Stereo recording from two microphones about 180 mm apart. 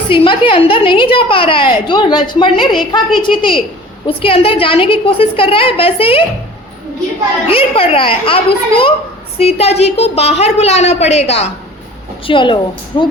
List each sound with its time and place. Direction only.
0.1 s a woman's voice: 30° left (ahead or behind)
7.4 s a woman's voice: 30° left (ahead or behind)